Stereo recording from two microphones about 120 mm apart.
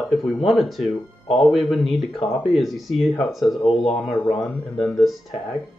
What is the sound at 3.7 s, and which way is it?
Speech, 60° left (ahead or behind).